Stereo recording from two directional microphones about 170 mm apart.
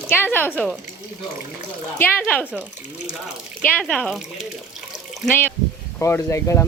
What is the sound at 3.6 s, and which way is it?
Speech, 5° left (ahead or behind).